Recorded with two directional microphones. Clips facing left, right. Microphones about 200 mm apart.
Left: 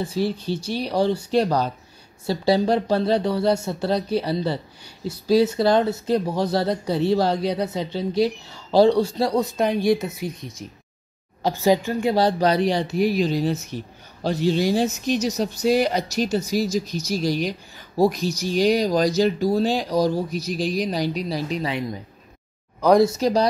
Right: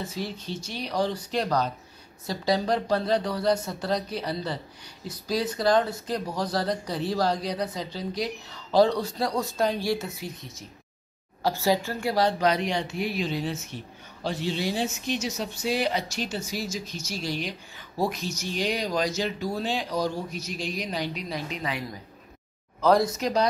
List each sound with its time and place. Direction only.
0.0 s speech: 30° left (ahead or behind)
12.2 s speech: 35° left (ahead or behind)
22.8 s speech: 15° left (ahead or behind)
23.1 s speech: 35° left (ahead or behind)